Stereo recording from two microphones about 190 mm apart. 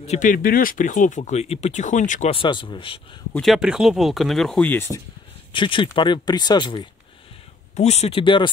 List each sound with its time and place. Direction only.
0.0 s speech: 40° left (ahead or behind)
2.3 s speech: 25° left (ahead or behind)
3.3 s speech: centre (ahead or behind)
5.5 s speech: 25° left (ahead or behind)
7.7 s speech: 35° left (ahead or behind)